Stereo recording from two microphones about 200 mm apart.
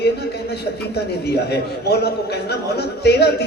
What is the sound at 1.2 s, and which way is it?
A man's voice, 55° left (ahead or behind).